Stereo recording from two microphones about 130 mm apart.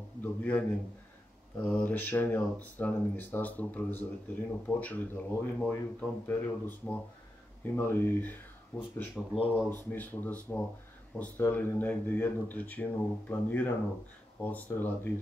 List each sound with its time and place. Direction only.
0.2 s speech: 10° left (ahead or behind)